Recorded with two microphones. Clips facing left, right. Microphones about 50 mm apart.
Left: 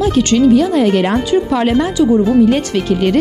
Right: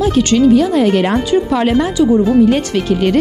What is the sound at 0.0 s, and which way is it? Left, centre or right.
Speech, right.